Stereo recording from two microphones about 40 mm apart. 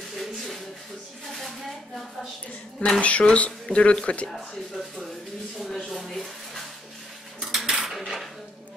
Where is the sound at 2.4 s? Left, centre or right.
Left.